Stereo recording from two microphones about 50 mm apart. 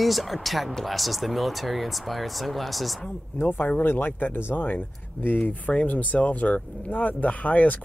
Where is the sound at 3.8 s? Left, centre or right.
Left.